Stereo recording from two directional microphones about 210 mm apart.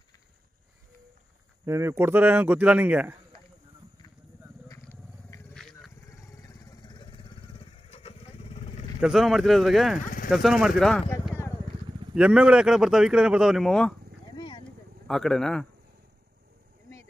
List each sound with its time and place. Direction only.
1.7 s speech: 10° right (ahead or behind)
4.6 s vehicle: 15° left (ahead or behind)
5.5 s roaring cats: centre (ahead or behind)
6.0 s vehicle: 15° left (ahead or behind)
9.0 s speech: centre (ahead or behind)
12.2 s speech: 5° right (ahead or behind)
14.3 s a sound: 25° left (ahead or behind)
15.0 s speech: centre (ahead or behind)